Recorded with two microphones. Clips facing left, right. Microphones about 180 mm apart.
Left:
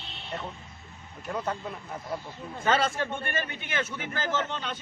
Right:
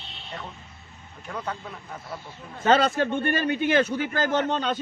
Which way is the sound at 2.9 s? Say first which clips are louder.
Right 8 dB; 35° right (ahead or behind).